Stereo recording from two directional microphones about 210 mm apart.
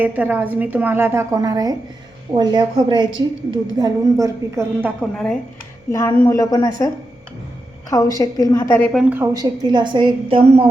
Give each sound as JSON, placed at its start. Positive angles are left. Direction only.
{"t": 0.0, "sound": "a woman's voice", "side_deg": -10}
{"t": 5.1, "sound": "a woman's voice", "side_deg": 5}
{"t": 5.9, "sound": "a woman's voice", "side_deg": 15}
{"t": 8.9, "sound": "a woman's voice", "side_deg": -5}
{"t": 9.3, "sound": "a woman's voice", "side_deg": -20}